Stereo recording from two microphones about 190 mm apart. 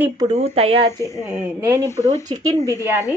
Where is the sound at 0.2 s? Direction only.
30° right (ahead or behind).